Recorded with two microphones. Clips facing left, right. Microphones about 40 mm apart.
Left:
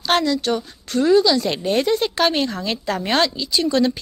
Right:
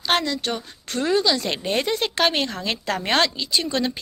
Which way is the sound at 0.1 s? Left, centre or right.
Right.